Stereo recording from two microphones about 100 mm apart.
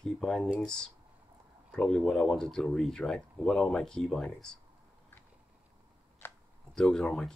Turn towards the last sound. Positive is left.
turn(degrees=5)  # may be behind; listen again after turning